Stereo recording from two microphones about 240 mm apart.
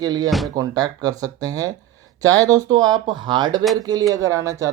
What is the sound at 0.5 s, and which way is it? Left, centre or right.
Speech, centre.